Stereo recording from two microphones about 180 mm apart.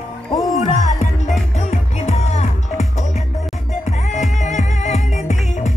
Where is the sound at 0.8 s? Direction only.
45° left (ahead or behind).